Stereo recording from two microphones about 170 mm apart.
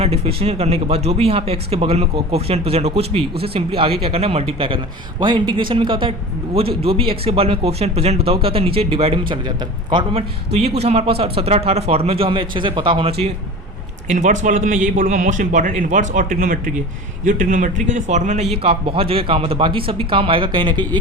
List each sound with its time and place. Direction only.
0.0 s a man's voice: 35° right (ahead or behind)
14.1 s a man's voice: 50° right (ahead or behind); by 21.0 s 30° right (ahead or behind)